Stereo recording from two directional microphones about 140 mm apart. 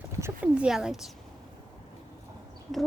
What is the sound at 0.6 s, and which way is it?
Speech, 5° right (ahead or behind).